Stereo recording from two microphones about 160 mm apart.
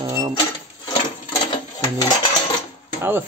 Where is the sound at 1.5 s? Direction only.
25° left (ahead or behind).